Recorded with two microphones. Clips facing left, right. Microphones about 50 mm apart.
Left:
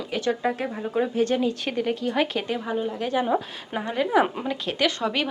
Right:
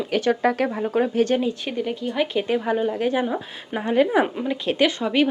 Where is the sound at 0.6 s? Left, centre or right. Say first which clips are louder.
Right 4 dB; right.